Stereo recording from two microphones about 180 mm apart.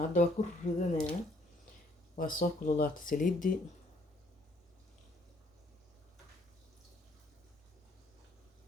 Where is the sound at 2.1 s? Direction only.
50° left (ahead or behind).